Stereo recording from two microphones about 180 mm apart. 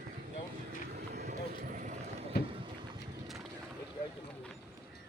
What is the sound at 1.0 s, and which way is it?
Vehicle, 60° right (ahead or behind).